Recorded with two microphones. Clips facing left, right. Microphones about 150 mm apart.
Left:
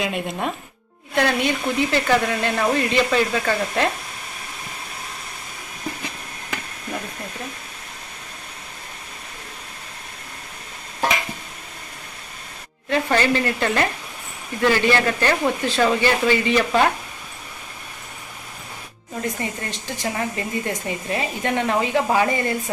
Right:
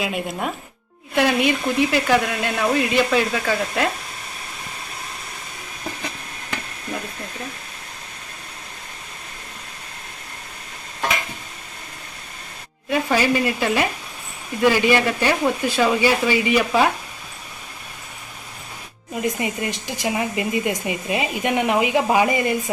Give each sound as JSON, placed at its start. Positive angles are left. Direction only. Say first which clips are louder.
{"t": 0.0, "sound": "speech", "louder": "even", "side_deg": 0}
{"t": 12.9, "sound": "speech", "louder": "even", "side_deg": -10}
{"t": 19.1, "sound": "speech", "louder": "right 3 dB", "side_deg": -15}